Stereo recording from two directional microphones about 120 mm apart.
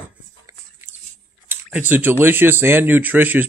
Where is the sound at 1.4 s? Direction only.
15° right (ahead or behind).